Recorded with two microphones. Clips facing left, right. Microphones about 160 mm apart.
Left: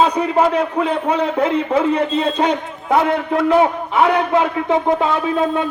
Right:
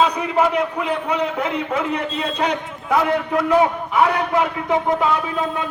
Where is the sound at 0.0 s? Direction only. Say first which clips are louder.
Left 3 dB; 30° left (ahead or behind).